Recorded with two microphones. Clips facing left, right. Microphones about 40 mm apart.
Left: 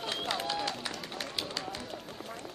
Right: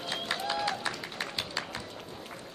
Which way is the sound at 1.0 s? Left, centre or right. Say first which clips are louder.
Right 1 dB; right.